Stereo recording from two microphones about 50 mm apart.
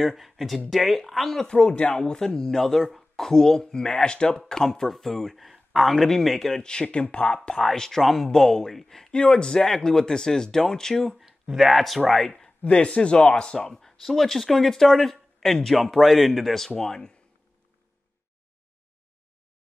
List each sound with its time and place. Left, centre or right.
0.0 s speech: centre; by 2.0 s left
2.0 s speech: centre
6.6 s speech: centre
7.5 s speech: centre
12.6 s speech: left